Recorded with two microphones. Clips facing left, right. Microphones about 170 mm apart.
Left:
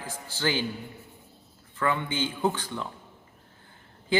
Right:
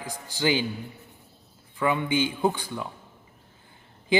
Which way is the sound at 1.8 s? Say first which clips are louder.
Right 4 dB; 15° right (ahead or behind).